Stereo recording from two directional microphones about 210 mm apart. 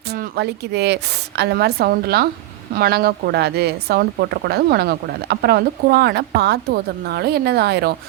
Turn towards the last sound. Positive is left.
turn(degrees=-50)  # may be behind; listen again after turning